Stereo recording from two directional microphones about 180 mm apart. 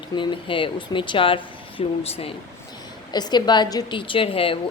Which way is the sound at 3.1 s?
25° left (ahead or behind).